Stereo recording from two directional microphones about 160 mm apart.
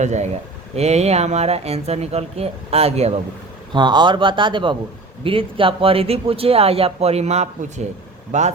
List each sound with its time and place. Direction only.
0.0 s speech: 45° right (ahead or behind)
3.7 s speech: 30° right (ahead or behind); by 8.5 s 45° right (ahead or behind)